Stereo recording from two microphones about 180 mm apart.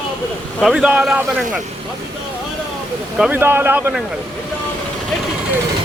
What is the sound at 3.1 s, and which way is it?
Speech, 10° right (ahead or behind).